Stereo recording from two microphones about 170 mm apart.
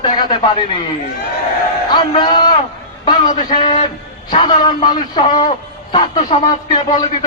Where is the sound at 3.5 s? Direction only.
25° left (ahead or behind).